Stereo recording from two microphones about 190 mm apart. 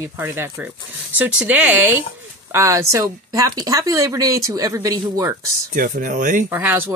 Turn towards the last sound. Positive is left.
turn(degrees=-10)  # may be behind; listen again after turning